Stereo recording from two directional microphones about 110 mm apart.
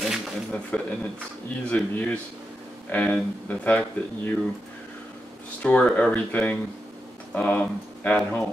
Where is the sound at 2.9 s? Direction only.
15° left (ahead or behind).